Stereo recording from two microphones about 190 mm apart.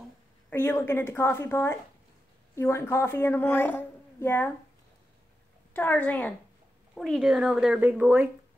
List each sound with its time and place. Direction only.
0.5 s a woman's voice: 10° left (ahead or behind)
5.7 s a woman's voice: 10° left (ahead or behind); by 8.3 s 10° right (ahead or behind)